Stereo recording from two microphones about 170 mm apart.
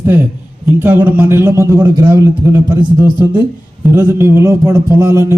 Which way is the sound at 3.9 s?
15° right (ahead or behind).